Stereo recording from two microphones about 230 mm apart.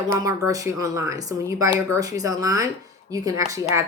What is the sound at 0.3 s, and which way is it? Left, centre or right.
A woman's voice, centre.